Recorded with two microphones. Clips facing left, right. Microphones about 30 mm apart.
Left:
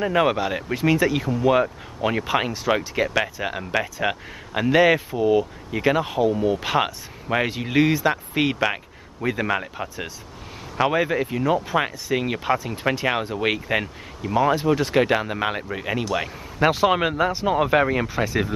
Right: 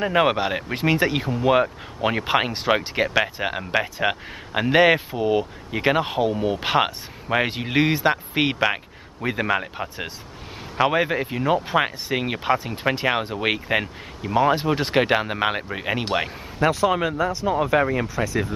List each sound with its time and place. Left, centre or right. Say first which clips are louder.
0.0 s speech: right 1 dB; centre
0.7 s speech: left 1 dB; right
1.5 s speech: right 2 dB; centre
8.5 s speech: right 1 dB; centre
11.0 s speech: even; centre
14.8 s speech: even; right
16.5 s speech: left 1 dB; centre